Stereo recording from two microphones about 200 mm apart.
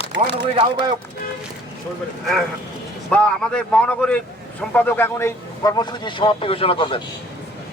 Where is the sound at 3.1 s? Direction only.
5° left (ahead or behind); by 7.0 s 25° left (ahead or behind).